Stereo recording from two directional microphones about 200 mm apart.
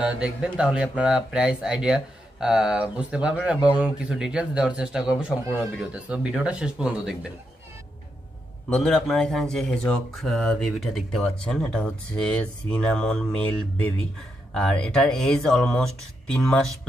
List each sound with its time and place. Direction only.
0.0 s speech: 5° right (ahead or behind)
8.6 s speech: 5° left (ahead or behind)